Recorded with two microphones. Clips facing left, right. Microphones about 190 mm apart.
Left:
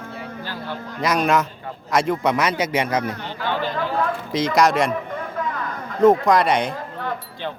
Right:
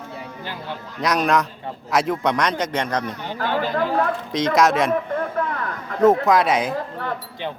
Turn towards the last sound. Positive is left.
turn(degrees=-5)  # may be behind; listen again after turning